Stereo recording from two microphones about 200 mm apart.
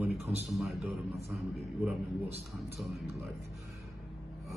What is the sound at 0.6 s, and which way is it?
Speech, centre (ahead or behind).